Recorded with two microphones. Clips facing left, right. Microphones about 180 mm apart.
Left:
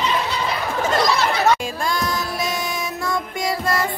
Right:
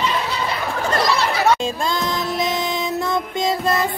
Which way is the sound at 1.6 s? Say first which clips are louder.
Right 2 dB; 25° right (ahead or behind).